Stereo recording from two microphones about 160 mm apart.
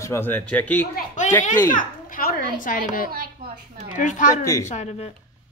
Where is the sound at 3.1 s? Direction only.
65° right (ahead or behind).